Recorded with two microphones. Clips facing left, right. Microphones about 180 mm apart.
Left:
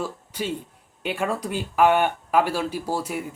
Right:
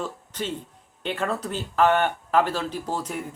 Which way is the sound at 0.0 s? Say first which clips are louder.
Left 2 dB; 10° left (ahead or behind).